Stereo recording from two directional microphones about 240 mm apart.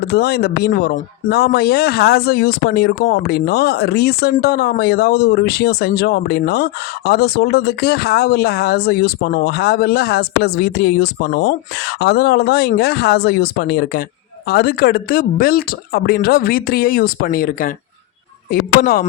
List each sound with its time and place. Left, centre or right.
0.1 s speech: left